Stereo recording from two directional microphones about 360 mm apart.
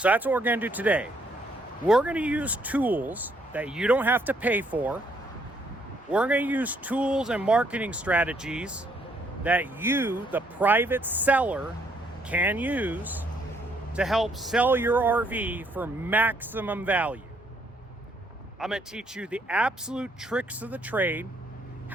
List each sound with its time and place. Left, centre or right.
0.0 s speech: centre
6.1 s speech: centre
18.6 s speech: centre